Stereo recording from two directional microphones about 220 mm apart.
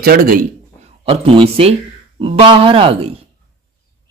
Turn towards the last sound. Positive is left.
turn(degrees=-25)  # may be behind; listen again after turning